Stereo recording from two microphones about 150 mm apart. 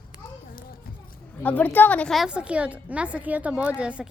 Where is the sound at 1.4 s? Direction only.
10° left (ahead or behind).